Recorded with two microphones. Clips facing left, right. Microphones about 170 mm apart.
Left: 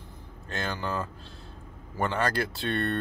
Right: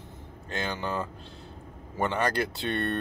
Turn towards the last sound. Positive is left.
turn(degrees=-20)  # may be behind; listen again after turning